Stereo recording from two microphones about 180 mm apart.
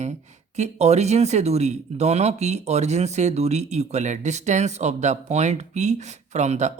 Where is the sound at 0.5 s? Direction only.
40° right (ahead or behind).